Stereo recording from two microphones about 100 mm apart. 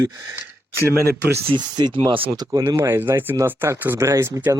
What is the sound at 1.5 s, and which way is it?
Speech, 45° right (ahead or behind).